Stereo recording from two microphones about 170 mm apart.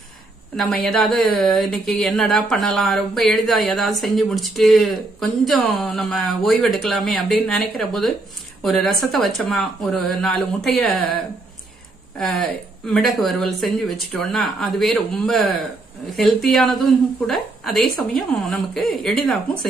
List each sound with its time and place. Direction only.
0.6 s speech: centre (ahead or behind)
12.2 s speech: 5° left (ahead or behind)